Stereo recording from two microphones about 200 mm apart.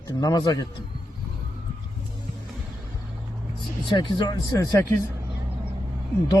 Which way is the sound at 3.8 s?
25° left (ahead or behind).